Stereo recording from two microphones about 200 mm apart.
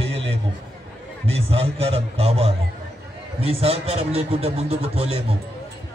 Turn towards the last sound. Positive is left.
turn(degrees=-30)  # may be behind; listen again after turning